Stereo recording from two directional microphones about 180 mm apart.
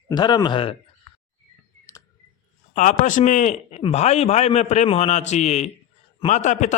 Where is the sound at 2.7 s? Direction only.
45° left (ahead or behind).